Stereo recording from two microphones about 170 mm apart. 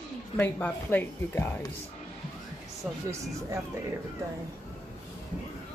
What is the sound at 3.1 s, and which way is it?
Speech, 20° right (ahead or behind).